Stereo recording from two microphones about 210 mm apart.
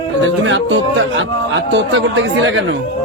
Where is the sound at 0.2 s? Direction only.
65° right (ahead or behind).